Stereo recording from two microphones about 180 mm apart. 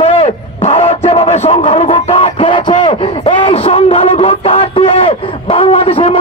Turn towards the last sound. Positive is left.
turn(degrees=35)  # may be behind; listen again after turning